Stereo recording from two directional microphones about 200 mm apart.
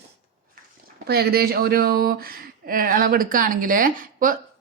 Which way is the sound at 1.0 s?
55° right (ahead or behind).